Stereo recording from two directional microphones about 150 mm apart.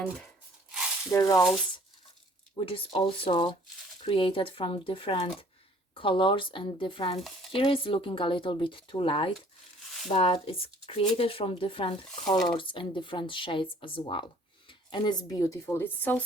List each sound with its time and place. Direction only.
1.1 s frying: 20° left (ahead or behind)
2.6 s a woman's voice: 35° left (ahead or behind)
15.6 s speech: 15° left (ahead or behind)